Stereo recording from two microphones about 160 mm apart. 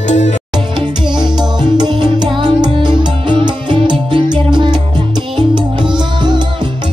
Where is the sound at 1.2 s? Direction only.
25° right (ahead or behind).